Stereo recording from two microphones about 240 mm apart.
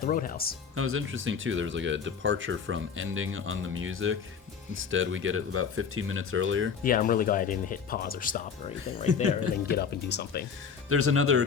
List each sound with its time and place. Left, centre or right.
0.0 s speech: left
0.8 s speech: right
6.8 s speech: left
9.7 s speech: left
10.8 s speech: right